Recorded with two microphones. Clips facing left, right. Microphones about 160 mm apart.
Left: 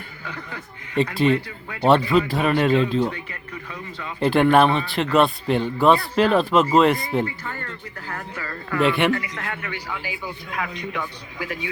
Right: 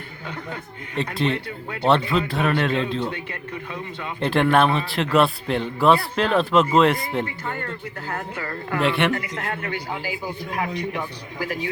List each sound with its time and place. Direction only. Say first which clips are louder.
1.1 s a man's voice: left 3 dB; 5° left (ahead or behind)
4.2 s a man's voice: left 2 dB; centre (ahead or behind)
8.0 s a woman's voice: right 2 dB; 25° right (ahead or behind)
8.8 s a man's voice: left 2 dB; centre (ahead or behind)
9.1 s speech: right 1 dB; 30° right (ahead or behind)